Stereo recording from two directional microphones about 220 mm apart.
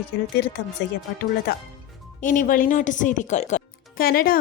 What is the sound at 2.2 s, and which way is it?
Speech, 35° left (ahead or behind).